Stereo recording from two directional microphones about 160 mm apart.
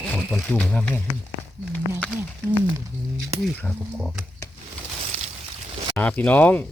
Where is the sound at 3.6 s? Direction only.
5° left (ahead or behind).